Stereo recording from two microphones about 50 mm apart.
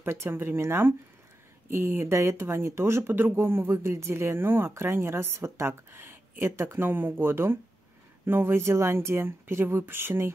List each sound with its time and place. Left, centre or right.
0.0 s speech: right
1.7 s speech: right
3.1 s speech: right